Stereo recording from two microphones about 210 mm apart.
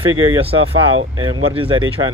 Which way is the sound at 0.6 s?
75° right (ahead or behind).